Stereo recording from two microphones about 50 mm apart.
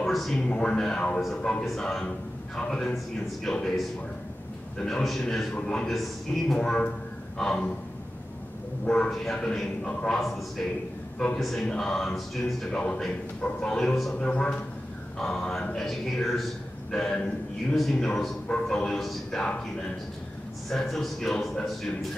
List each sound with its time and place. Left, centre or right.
0.0 s speech: centre
0.5 s a man's voice: centre
1.8 s speech: centre
4.7 s speech: centre
5.5 s speech: centre
5.9 s speech: centre
6.6 s speech: centre
9.1 s speech: centre
11.3 s speech: centre
11.6 s speech: centre
12.7 s a man's voice: centre
18.9 s speech: centre
20.7 s speech: centre